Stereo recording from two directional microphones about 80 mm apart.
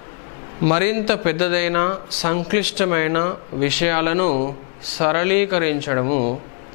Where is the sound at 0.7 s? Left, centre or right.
Centre.